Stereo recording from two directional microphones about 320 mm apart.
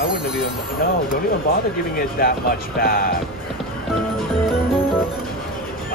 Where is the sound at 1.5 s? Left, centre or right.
Left.